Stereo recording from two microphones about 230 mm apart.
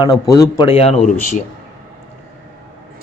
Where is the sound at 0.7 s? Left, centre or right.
Left.